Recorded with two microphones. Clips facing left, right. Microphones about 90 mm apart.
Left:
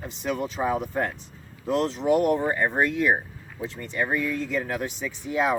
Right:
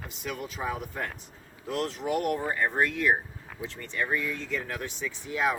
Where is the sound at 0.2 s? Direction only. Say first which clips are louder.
Left 8 dB; 30° left (ahead or behind).